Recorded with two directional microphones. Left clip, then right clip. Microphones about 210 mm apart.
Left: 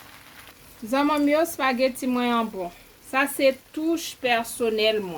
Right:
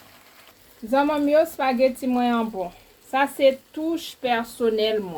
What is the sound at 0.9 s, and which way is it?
Speech, 25° left (ahead or behind).